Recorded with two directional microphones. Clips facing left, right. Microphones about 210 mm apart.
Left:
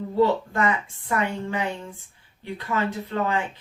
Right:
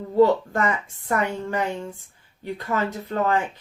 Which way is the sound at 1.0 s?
45° right (ahead or behind).